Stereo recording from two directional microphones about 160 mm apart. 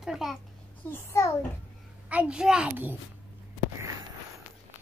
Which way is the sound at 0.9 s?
15° left (ahead or behind).